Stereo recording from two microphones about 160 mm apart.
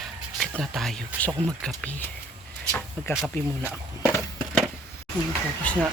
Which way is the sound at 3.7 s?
10° left (ahead or behind).